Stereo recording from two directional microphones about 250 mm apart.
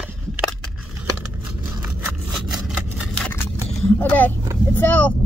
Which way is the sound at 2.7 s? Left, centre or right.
Centre.